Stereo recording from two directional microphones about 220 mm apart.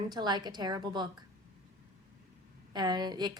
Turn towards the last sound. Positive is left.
turn(degrees=-20)  # may be behind; listen again after turning